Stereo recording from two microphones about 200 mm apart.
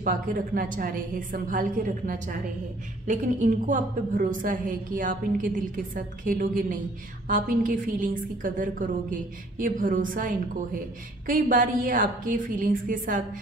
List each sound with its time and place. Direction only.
0.0 s a woman's voice: 45° right (ahead or behind)